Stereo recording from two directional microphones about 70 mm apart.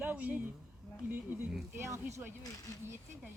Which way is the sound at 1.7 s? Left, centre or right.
Right.